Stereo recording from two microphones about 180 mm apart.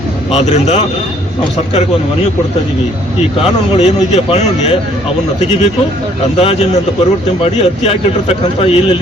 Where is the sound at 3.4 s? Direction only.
35° left (ahead or behind).